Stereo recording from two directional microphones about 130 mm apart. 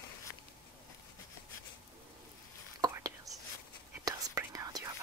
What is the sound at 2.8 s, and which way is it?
Whispering, 30° right (ahead or behind).